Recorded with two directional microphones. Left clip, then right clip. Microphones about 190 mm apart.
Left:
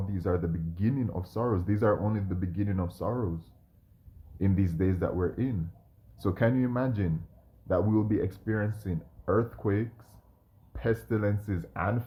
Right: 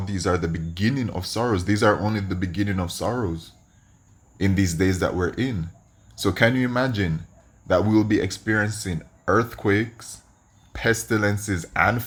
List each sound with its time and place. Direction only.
0.0 s speech: 15° right (ahead or behind)